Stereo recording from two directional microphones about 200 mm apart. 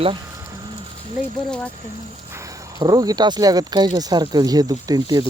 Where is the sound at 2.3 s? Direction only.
20° right (ahead or behind).